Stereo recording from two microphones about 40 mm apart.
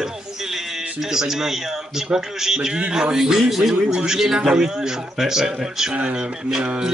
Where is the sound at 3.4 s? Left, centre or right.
Centre.